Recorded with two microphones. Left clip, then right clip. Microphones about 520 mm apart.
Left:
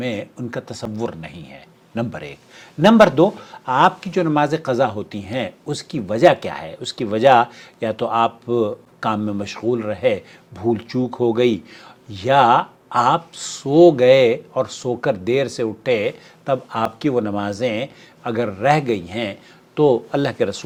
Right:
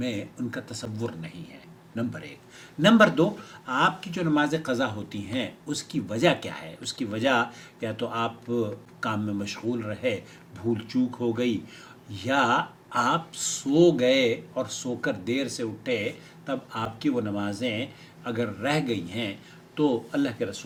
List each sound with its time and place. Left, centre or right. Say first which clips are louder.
0.0 s speech: left 6 dB; left